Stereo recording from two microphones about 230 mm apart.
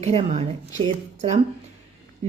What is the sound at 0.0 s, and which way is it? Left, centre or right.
Speech, right.